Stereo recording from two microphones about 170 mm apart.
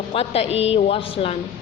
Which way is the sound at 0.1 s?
35° left (ahead or behind).